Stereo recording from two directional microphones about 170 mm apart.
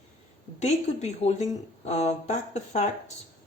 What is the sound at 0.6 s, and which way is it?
Speech, 40° left (ahead or behind).